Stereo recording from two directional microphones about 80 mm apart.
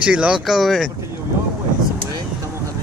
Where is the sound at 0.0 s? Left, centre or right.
Centre.